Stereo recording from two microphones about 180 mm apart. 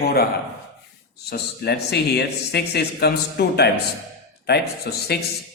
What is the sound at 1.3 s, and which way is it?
A man's voice, 65° left (ahead or behind).